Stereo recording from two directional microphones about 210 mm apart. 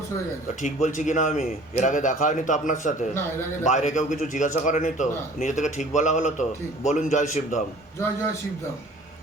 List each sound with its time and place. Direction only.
0.6 s a man's voice: 35° left (ahead or behind)